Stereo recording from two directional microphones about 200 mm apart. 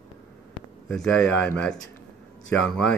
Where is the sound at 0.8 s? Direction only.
Centre (ahead or behind).